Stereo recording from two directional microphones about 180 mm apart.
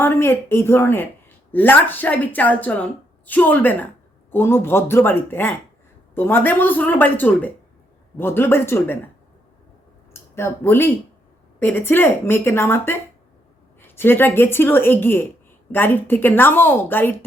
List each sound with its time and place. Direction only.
0.0 s a woman's voice: 15° left (ahead or behind)
10.1 s a woman's voice: 15° left (ahead or behind)